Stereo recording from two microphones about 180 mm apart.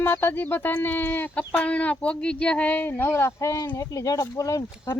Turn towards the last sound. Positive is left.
turn(degrees=20)  # may be behind; listen again after turning